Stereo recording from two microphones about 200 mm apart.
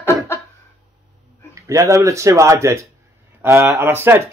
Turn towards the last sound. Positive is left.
turn(degrees=-10)  # may be behind; listen again after turning